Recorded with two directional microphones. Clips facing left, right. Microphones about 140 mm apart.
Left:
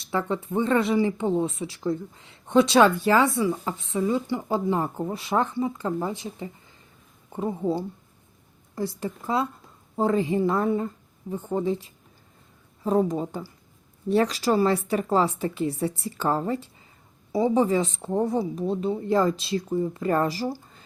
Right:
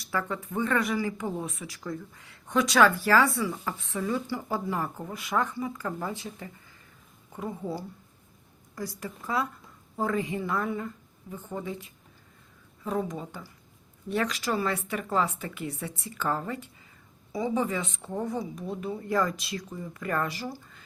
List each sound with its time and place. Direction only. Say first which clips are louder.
0.0 s speech: left 5 dB; 25° left (ahead or behind)